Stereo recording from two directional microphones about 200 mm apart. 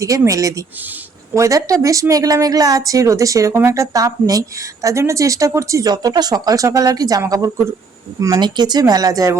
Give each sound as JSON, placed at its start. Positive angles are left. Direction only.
{"t": 0.0, "sound": "a woman's voice", "side_deg": -15}